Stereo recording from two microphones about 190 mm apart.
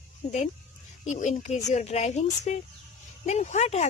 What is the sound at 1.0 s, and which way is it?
A child's voice, 40° left (ahead or behind).